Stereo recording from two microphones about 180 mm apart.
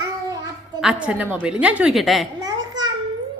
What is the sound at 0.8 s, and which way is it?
A woman's voice, 5° right (ahead or behind).